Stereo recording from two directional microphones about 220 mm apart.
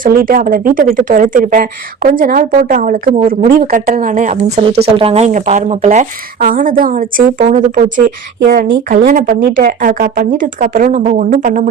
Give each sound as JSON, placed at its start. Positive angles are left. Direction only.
{"t": 0.0, "sound": "speech", "side_deg": -40}